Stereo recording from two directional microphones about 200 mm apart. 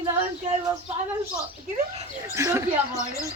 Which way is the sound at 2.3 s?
15° right (ahead or behind).